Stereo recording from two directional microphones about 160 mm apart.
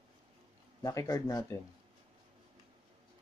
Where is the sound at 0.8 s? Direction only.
20° left (ahead or behind).